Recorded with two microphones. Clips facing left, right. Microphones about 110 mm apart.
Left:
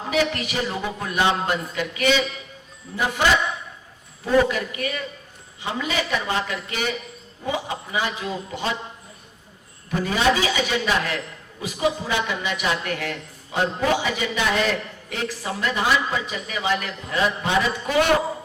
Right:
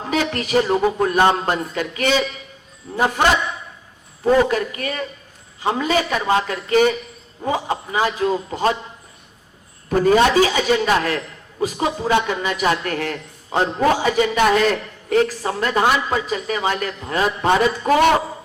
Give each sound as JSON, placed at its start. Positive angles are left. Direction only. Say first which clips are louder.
{"t": 0.1, "sound": "a man's voice", "louder": "right 4 dB", "side_deg": -40}
{"t": 9.9, "sound": "a man's voice", "louder": "right 7 dB", "side_deg": -45}